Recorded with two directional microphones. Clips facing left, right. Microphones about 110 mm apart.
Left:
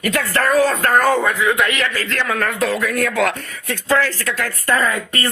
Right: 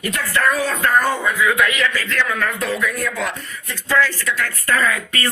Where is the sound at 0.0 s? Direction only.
90° left.